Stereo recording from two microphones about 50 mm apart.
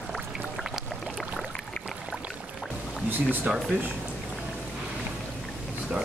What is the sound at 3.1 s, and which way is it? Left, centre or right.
Speech, right.